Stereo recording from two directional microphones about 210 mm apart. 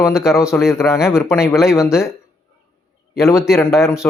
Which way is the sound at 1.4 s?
Centre (ahead or behind).